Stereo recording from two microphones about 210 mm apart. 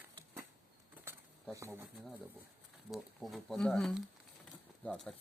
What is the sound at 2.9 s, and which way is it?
Speech, centre (ahead or behind).